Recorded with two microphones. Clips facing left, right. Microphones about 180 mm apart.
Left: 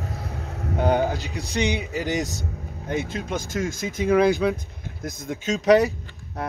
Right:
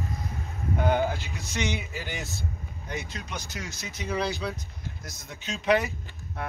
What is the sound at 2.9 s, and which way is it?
A man's voice, 50° left (ahead or behind).